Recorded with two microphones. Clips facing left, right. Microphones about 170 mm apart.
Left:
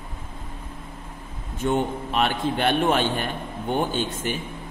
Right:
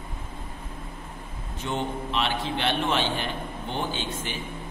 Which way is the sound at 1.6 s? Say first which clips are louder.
Left 6 dB; 50° left (ahead or behind).